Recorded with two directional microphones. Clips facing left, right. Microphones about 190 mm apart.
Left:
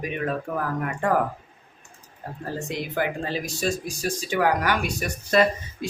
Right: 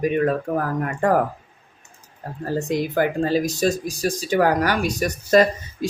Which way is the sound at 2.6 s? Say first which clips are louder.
Right 7 dB; 40° right (ahead or behind).